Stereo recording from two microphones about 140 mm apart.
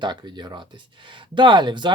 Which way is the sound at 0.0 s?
35° right (ahead or behind).